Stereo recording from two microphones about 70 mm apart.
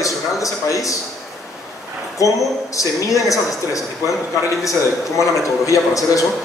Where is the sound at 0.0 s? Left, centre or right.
Left.